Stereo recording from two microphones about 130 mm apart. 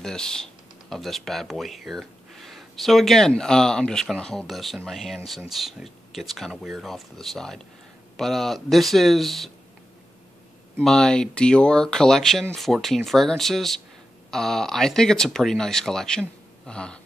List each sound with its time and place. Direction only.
0.0 s speech: 5° left (ahead or behind)
10.8 s speech: 5° left (ahead or behind)